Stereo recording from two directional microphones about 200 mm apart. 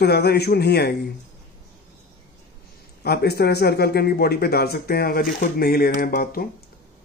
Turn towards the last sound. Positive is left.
turn(degrees=45)  # may be behind; listen again after turning